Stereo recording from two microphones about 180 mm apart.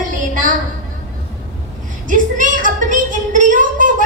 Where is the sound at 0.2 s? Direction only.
45° right (ahead or behind).